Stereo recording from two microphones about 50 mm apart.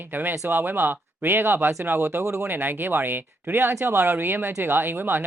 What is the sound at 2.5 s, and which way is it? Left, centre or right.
Speech, right.